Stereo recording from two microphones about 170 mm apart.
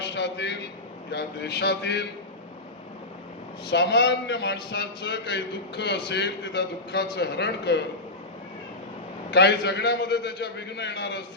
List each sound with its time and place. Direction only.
0.0 s a sound: 90° left
1.1 s a man's voice: 80° left
3.7 s a man's voice: 90° left
9.3 s a man's voice: 85° left